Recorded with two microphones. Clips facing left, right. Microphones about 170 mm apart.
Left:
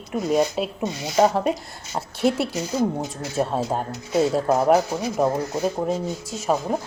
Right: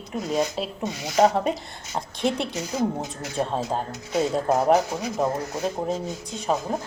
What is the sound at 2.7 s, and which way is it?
Speech, 30° left (ahead or behind).